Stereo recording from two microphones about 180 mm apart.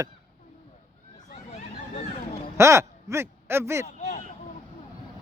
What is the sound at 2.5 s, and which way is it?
Speech, 15° right (ahead or behind).